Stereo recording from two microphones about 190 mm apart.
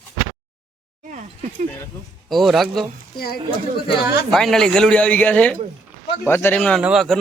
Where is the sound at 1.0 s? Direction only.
40° right (ahead or behind).